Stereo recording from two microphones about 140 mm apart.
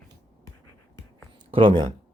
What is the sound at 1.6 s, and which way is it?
Speech, 40° right (ahead or behind).